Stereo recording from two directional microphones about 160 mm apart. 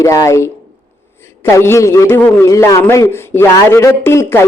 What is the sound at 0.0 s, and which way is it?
A man's voice, 20° left (ahead or behind).